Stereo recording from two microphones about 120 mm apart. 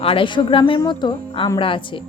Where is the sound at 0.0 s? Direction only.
50° left (ahead or behind).